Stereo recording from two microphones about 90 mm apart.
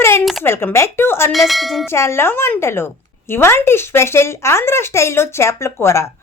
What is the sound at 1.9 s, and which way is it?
A woman's voice, 30° left (ahead or behind).